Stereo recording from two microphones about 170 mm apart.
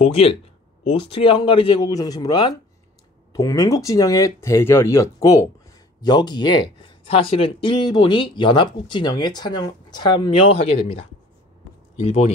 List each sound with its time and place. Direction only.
0.0 s speech: 35° left (ahead or behind)
12.0 s speech: 40° left (ahead or behind)